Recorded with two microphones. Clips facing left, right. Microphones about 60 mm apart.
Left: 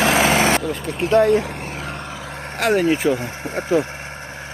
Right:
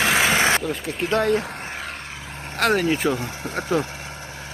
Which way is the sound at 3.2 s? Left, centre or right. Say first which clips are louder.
Left 2 dB; centre.